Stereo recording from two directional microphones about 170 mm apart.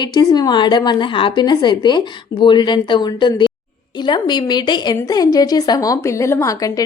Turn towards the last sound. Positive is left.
turn(degrees=20)  # may be behind; listen again after turning